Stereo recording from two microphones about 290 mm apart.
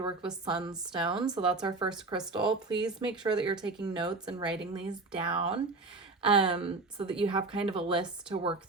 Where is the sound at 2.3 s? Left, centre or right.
Centre.